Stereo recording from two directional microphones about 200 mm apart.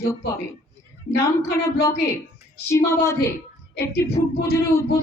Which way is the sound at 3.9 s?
55° left (ahead or behind).